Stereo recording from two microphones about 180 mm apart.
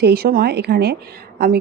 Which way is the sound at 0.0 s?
60° right (ahead or behind).